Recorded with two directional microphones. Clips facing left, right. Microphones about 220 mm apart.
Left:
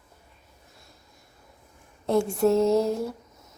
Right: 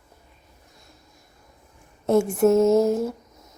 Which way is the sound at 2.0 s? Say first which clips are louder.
Right 4 dB; 20° right (ahead or behind).